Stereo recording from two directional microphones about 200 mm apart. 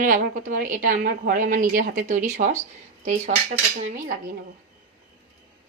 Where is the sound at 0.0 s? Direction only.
45° right (ahead or behind).